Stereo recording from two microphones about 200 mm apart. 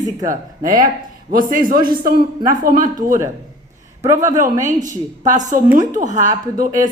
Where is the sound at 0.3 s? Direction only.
45° right (ahead or behind).